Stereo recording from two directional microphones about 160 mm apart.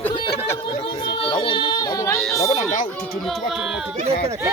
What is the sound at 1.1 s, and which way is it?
Speech, 35° left (ahead or behind).